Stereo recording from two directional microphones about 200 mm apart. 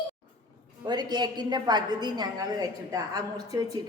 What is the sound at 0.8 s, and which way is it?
A woman's voice, 20° right (ahead or behind).